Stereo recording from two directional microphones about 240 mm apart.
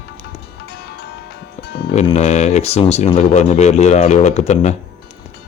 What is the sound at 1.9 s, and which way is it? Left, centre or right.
Speech, left.